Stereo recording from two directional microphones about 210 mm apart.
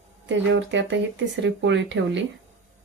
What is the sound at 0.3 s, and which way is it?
Speech, 60° right (ahead or behind).